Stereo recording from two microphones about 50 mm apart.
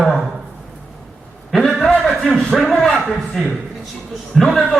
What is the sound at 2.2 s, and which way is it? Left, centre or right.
Speech, centre.